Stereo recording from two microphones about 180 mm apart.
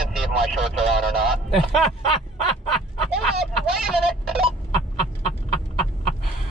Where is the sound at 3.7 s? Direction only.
Centre (ahead or behind).